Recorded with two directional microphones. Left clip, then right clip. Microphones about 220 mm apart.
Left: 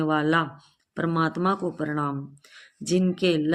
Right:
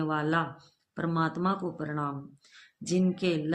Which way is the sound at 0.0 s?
45° left (ahead or behind).